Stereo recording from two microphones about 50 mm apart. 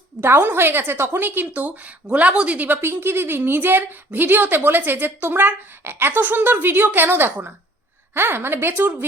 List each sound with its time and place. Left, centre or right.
0.2 s a woman's voice: right
2.8 s a woman's voice: right